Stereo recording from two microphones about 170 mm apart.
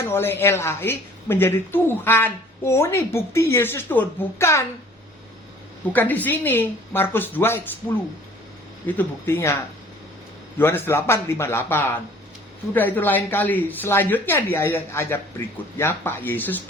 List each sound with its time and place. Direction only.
0.1 s speech: 15° left (ahead or behind)
5.9 s speech: 10° left (ahead or behind)
10.6 s speech: 15° left (ahead or behind)